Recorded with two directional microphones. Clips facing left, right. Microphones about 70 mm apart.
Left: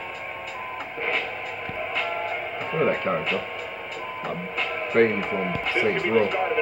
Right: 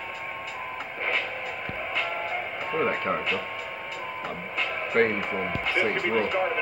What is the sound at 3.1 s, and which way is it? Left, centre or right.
Speech, right.